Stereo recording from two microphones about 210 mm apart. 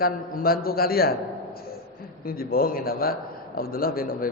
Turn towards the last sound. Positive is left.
turn(degrees=45)  # may be behind; listen again after turning